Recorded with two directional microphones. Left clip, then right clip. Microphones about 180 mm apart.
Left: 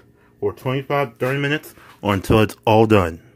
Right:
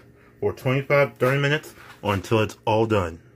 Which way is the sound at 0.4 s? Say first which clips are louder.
Left 1 dB; 30° left (ahead or behind).